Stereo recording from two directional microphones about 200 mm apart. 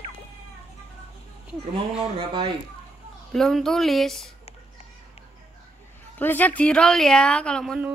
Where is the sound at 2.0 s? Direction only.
25° right (ahead or behind).